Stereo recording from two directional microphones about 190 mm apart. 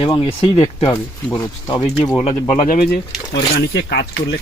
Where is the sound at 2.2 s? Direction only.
35° left (ahead or behind); by 4.3 s 60° left (ahead or behind).